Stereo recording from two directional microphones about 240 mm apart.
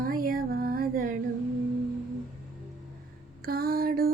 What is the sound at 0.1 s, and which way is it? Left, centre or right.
Music, right.